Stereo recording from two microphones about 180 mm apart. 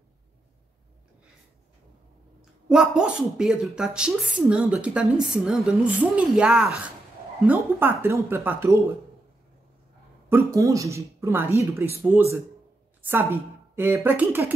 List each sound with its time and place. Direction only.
2.7 s speech: 5° right (ahead or behind)
10.3 s speech: 15° right (ahead or behind)
13.0 s speech: 10° right (ahead or behind)